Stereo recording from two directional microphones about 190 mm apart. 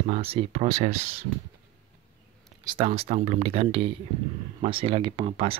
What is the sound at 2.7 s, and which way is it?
Speech, 30° right (ahead or behind).